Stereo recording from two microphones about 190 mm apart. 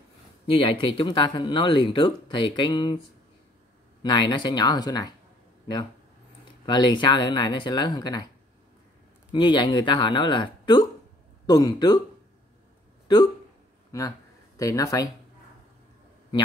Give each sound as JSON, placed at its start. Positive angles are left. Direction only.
{"t": 0.5, "sound": "speech", "side_deg": 25}
{"t": 4.0, "sound": "speech", "side_deg": 25}
{"t": 6.4, "sound": "speech", "side_deg": 25}
{"t": 9.3, "sound": "speech", "side_deg": 25}
{"t": 14.6, "sound": "speech", "side_deg": 15}